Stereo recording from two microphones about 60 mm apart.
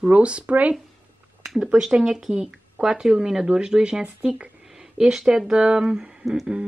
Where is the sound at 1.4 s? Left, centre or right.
Centre.